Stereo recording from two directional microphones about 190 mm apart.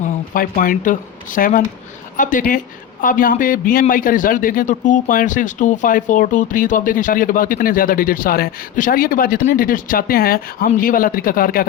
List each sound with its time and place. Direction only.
0.0 s a man's voice: 45° left (ahead or behind)